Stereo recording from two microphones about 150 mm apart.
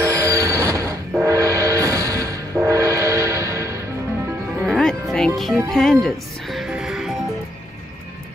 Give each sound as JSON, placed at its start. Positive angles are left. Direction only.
{"t": 0.0, "sound": "music", "side_deg": -20}
{"t": 4.6, "sound": "music", "side_deg": 5}